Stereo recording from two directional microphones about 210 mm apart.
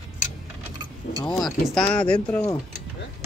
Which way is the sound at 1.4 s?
5° left (ahead or behind).